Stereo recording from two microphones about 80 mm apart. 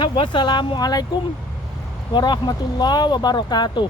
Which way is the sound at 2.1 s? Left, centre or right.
Left.